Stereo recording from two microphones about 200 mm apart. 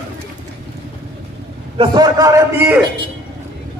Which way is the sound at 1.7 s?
20° right (ahead or behind).